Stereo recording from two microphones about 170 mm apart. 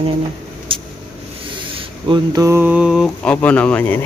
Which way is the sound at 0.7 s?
30° right (ahead or behind).